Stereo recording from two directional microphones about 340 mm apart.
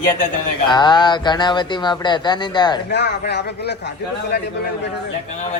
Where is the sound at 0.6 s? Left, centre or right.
Centre.